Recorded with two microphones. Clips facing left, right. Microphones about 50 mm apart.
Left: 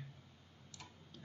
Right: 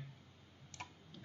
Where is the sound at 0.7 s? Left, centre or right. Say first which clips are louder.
Right 6 dB; right.